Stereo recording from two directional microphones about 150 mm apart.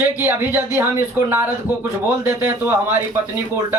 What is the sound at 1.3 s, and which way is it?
Speech, 15° right (ahead or behind).